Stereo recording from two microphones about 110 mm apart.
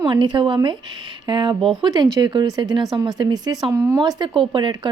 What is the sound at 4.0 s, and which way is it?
Speech, 40° right (ahead or behind).